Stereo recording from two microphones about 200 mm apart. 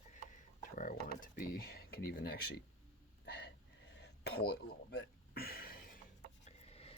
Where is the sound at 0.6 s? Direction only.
40° left (ahead or behind).